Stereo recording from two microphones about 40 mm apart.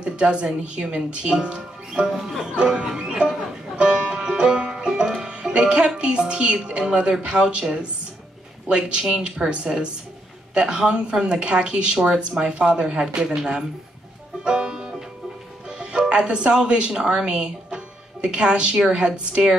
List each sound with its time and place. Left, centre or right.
0.0 s speech: right
2.2 s music: centre
8.6 s speech: right
14.4 s music: right
15.8 s speech: right